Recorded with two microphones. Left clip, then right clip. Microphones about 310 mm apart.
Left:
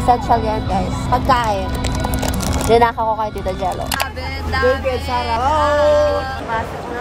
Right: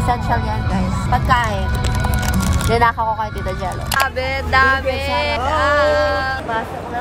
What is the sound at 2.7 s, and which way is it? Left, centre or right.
Speech, centre.